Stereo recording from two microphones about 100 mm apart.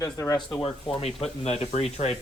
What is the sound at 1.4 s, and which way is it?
Speech, 90° left.